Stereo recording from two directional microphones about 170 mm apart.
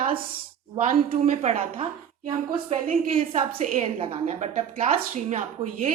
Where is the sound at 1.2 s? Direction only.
40° right (ahead or behind).